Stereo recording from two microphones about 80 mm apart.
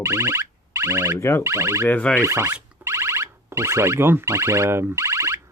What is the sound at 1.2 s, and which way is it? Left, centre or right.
Speech, left.